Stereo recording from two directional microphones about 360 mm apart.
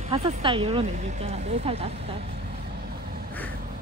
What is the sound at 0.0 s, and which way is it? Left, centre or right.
Speech, centre.